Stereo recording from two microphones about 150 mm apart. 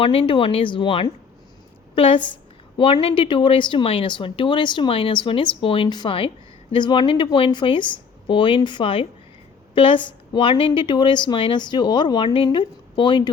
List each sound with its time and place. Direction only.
0.0 s a woman's voice: 40° left (ahead or behind)